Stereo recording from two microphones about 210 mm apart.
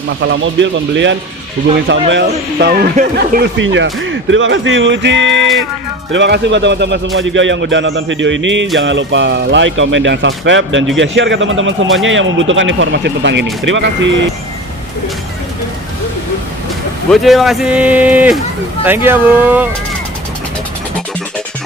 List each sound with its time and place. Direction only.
0.2 s speech: 60° right (ahead or behind); by 3.4 s 45° right (ahead or behind)
3.6 s speech: 60° right (ahead or behind)
17.1 s a man's voice: centre (ahead or behind)